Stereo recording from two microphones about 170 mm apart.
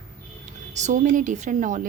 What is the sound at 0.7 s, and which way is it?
A woman's voice, 45° right (ahead or behind).